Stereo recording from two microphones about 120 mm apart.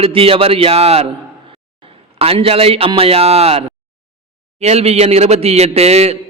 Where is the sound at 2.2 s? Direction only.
55° right (ahead or behind).